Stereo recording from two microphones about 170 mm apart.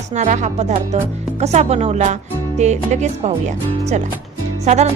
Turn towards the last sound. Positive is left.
turn(degrees=-40)  # may be behind; listen again after turning